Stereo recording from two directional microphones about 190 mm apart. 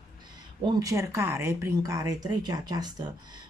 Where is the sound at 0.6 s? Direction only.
20° right (ahead or behind).